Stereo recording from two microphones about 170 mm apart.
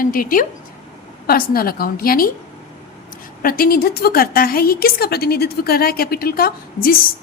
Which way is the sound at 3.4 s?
60° left (ahead or behind).